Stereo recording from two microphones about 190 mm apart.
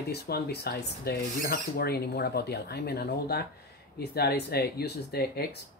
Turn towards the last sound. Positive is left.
turn(degrees=55)  # may be behind; listen again after turning